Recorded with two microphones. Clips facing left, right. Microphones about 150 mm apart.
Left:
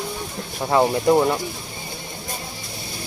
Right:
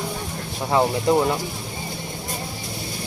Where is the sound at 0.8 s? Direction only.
5° left (ahead or behind).